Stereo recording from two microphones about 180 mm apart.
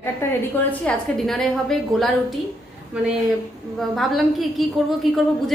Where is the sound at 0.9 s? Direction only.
Centre (ahead or behind).